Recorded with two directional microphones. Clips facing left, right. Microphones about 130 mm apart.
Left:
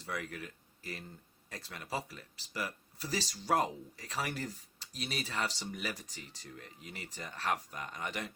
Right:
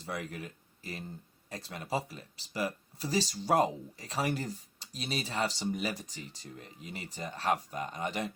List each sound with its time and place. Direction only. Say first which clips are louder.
0.0 s speech: right 2 dB; 25° right (ahead or behind)